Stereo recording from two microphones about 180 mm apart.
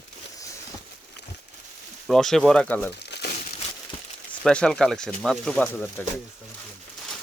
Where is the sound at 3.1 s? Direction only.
65° left (ahead or behind).